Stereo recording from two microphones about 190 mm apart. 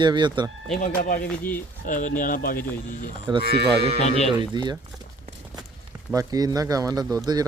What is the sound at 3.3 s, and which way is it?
Speech, 25° right (ahead or behind).